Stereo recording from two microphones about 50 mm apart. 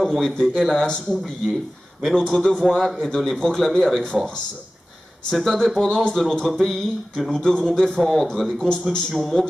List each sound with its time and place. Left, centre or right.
0.0 s a sound: centre
0.6 s speech: centre
1.4 s speech: centre
2.0 s a man's voice: centre
5.3 s speech: centre
8.0 s a man's voice: centre
8.5 s speech: centre
9.1 s a man's voice: centre